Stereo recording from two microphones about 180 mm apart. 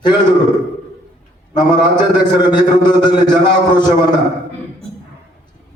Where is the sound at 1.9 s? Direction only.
25° left (ahead or behind).